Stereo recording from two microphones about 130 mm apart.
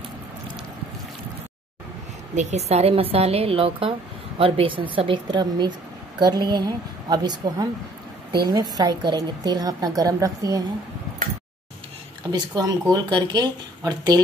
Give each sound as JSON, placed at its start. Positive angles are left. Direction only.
{"t": 2.3, "sound": "a woman's voice", "side_deg": -60}
{"t": 12.3, "sound": "speech", "side_deg": -30}